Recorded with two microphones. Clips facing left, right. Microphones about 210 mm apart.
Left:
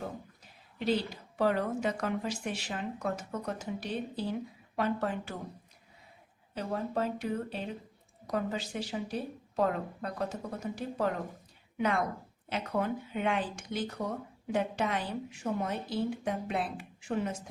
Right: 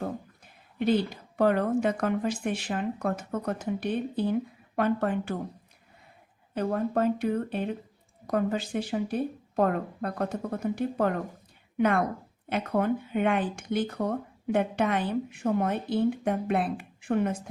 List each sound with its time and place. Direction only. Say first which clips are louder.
0.8 s speech: right 5 dB; 55° right (ahead or behind)
6.5 s speech: right 6 dB; 55° right (ahead or behind)